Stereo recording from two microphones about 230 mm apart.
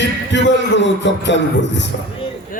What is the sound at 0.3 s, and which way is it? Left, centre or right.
Music, left.